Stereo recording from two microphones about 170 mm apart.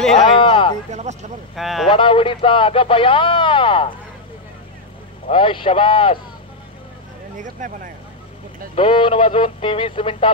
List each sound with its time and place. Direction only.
0.2 s a sound: 30° left (ahead or behind)
1.1 s speech: 45° right (ahead or behind)
1.5 s speech: centre (ahead or behind)
1.9 s speech: 30° left (ahead or behind)
5.3 s speech: 30° left (ahead or behind)
7.3 s speech: 50° right (ahead or behind)
8.7 s speech: 30° left (ahead or behind)